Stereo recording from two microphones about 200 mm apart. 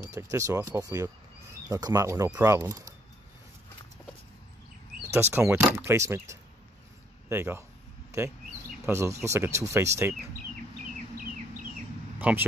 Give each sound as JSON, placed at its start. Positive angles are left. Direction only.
{"t": 0.1, "sound": "speech", "side_deg": -15}
{"t": 5.3, "sound": "speech", "side_deg": -10}
{"t": 8.8, "sound": "speech", "side_deg": -15}
{"t": 12.2, "sound": "speech", "side_deg": -10}